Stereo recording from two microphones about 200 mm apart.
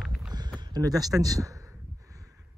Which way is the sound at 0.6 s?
20° right (ahead or behind).